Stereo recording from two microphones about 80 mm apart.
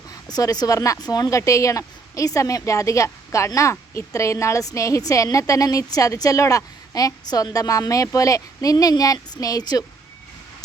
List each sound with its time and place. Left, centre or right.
0.3 s a woman's voice: left
1.4 s a woman's voice: left